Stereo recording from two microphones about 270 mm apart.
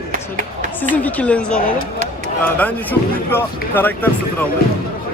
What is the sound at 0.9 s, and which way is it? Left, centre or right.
Speech, centre.